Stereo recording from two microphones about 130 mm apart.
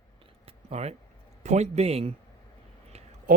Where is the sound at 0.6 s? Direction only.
55° right (ahead or behind).